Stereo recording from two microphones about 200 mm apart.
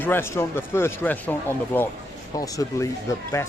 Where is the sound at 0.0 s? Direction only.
10° left (ahead or behind).